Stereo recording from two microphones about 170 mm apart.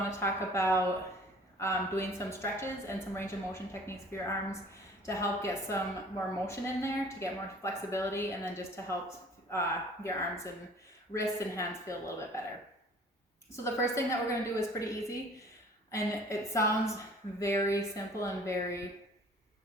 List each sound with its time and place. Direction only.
0.1 s a woman's voice: 15° left (ahead or behind)
13.8 s a woman's voice: 15° left (ahead or behind)